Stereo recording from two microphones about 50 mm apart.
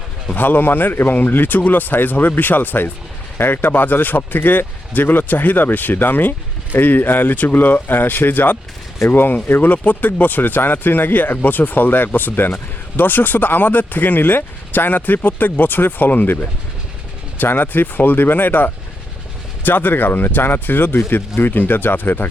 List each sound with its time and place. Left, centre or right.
0.3 s speech: left